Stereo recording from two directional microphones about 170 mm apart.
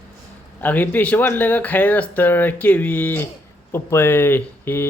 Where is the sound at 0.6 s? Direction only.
10° left (ahead or behind).